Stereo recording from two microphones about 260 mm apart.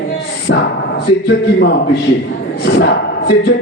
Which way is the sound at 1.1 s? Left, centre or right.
Left.